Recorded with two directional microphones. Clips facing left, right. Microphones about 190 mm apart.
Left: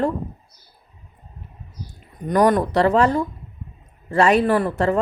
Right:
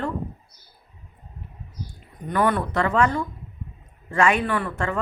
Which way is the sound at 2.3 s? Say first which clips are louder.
Left 6 dB; 40° left (ahead or behind).